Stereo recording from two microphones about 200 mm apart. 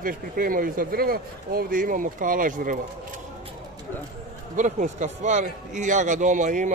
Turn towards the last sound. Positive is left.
turn(degrees=-40)  # may be behind; listen again after turning